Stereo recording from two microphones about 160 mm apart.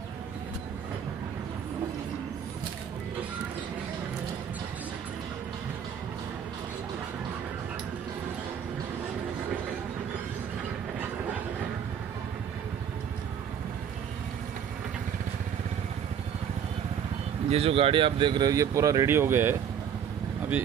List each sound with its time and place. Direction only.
17.5 s speech: 35° right (ahead or behind); by 19.5 s 15° right (ahead or behind)